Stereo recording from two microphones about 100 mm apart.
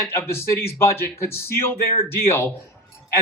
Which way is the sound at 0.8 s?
25° left (ahead or behind).